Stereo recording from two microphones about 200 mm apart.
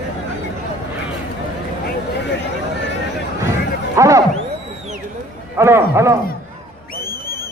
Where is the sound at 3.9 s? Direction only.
15° right (ahead or behind).